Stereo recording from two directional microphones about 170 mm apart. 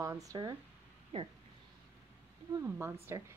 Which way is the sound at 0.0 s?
20° right (ahead or behind).